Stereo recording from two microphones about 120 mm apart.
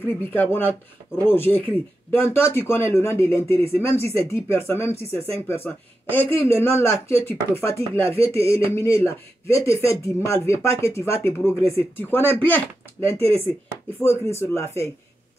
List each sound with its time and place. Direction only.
0.0 s speech: 15° left (ahead or behind)